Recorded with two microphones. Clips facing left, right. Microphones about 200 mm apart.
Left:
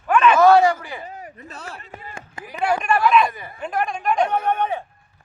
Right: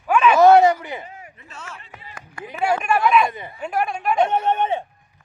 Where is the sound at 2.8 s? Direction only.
5° right (ahead or behind).